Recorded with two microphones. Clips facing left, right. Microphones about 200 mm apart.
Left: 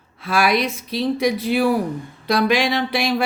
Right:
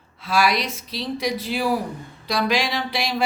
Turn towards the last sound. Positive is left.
turn(degrees=55)  # may be behind; listen again after turning